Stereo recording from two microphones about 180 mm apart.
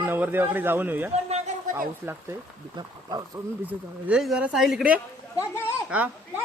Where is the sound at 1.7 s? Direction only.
15° right (ahead or behind).